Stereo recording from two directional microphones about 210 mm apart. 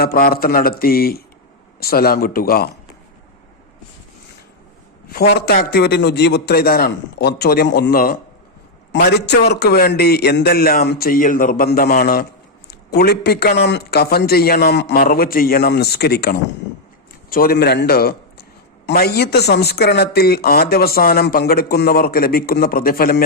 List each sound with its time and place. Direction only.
0.0 s speech: 45° left (ahead or behind)
5.0 s a man's voice: 45° left (ahead or behind)